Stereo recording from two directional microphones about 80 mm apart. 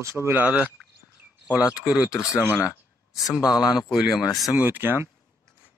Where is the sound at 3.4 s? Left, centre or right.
Left.